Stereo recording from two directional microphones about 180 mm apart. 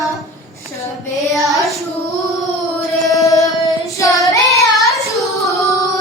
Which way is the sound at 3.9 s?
20° left (ahead or behind).